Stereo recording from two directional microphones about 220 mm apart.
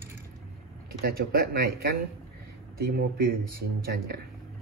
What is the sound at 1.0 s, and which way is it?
Speech, 40° right (ahead or behind).